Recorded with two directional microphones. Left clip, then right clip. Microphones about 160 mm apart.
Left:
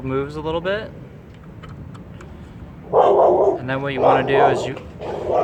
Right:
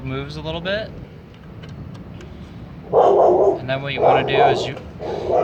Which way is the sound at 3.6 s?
65° left (ahead or behind).